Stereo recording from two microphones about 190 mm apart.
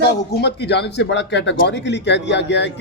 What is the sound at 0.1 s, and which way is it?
A man's voice, 60° left (ahead or behind).